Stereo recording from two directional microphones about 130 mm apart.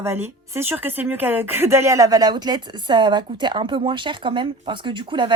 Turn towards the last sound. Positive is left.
turn(degrees=-40)  # may be behind; listen again after turning